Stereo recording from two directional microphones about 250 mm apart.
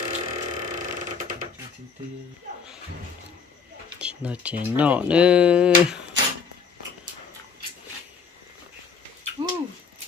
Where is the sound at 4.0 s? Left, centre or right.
Centre.